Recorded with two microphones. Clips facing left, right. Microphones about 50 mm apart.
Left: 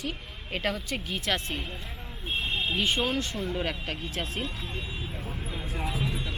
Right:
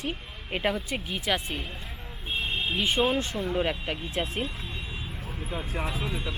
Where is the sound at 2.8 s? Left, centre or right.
Centre.